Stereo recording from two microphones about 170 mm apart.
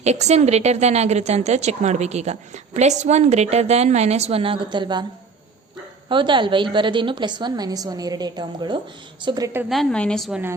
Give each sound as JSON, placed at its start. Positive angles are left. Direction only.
{"t": 0.0, "sound": "a woman's voice", "side_deg": -40}
{"t": 6.1, "sound": "a woman's voice", "side_deg": -30}
{"t": 9.6, "sound": "a woman's voice", "side_deg": 5}